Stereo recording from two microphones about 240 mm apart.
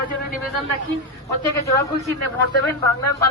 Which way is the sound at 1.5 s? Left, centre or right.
Centre.